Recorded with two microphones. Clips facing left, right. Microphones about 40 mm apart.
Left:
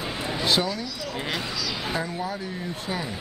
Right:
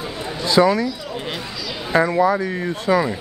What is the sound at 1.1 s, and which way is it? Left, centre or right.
Speech, centre.